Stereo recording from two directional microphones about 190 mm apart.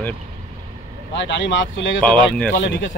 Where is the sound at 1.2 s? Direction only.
70° left (ahead or behind).